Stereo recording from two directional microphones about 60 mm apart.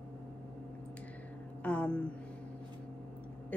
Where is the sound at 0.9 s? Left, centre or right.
Left.